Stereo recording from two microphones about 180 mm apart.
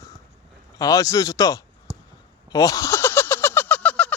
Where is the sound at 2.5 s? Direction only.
20° left (ahead or behind).